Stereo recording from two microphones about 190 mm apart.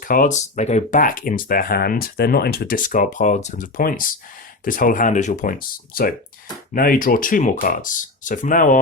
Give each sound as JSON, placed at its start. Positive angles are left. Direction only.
{"t": 0.1, "sound": "speech", "side_deg": 45}